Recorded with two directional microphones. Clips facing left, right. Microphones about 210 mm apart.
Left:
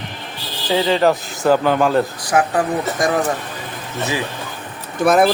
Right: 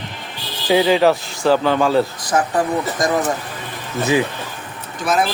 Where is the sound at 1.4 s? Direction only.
10° left (ahead or behind).